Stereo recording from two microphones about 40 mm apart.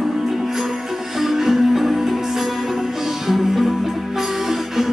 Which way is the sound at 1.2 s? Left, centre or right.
Centre.